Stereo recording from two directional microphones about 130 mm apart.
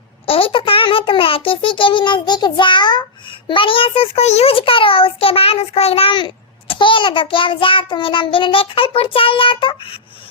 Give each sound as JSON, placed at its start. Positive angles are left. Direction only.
{"t": 0.3, "sound": "a child's voice", "side_deg": 45}